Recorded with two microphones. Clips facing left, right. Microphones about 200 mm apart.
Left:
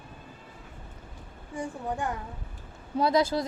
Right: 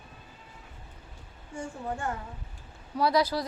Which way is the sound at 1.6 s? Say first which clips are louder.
Left 2 dB; 15° left (ahead or behind).